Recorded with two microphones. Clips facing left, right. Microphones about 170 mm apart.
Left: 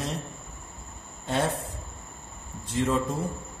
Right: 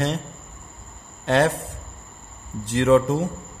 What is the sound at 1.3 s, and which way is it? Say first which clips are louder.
Speech: right 8 dB; 80° right.